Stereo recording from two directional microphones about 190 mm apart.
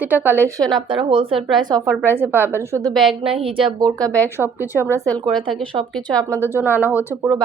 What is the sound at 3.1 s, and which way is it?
Speech, 30° right (ahead or behind).